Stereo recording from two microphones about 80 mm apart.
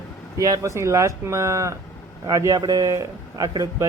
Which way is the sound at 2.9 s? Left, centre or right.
Right.